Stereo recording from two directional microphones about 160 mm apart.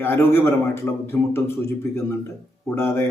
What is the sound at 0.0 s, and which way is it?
A man's voice, 15° left (ahead or behind).